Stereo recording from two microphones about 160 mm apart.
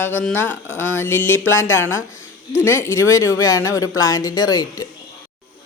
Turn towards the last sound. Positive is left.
turn(degrees=25)  # may be behind; listen again after turning